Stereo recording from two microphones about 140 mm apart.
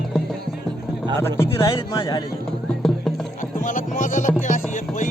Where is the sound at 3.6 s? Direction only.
65° left (ahead or behind).